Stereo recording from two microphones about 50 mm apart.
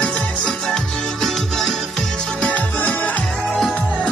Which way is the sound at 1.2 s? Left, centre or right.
Centre.